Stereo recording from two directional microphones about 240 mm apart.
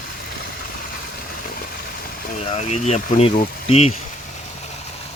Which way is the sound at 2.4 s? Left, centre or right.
Left.